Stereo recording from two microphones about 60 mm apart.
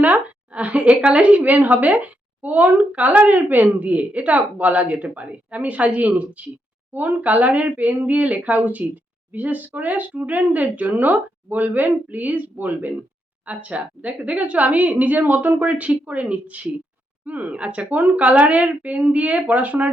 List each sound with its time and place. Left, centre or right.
0.0 s speech: right